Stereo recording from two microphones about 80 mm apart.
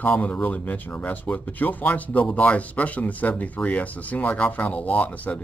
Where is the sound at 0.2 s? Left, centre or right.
Left.